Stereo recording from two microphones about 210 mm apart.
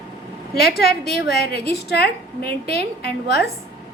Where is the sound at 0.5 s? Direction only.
50° left (ahead or behind).